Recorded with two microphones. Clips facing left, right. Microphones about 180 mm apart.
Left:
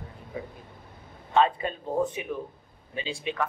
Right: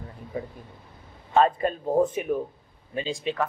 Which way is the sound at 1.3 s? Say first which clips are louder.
Right 3 dB; 45° right (ahead or behind).